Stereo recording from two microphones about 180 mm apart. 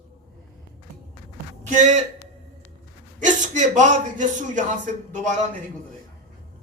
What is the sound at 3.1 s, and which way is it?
Speech, 45° right (ahead or behind).